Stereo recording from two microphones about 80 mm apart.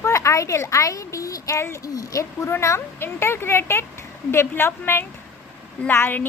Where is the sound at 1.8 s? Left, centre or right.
Left.